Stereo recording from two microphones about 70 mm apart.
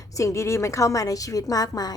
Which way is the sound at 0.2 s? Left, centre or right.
Left.